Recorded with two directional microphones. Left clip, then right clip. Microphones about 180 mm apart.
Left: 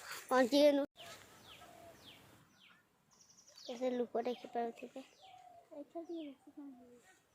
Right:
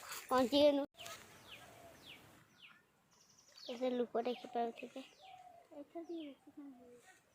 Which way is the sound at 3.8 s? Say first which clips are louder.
Even; 10° left (ahead or behind).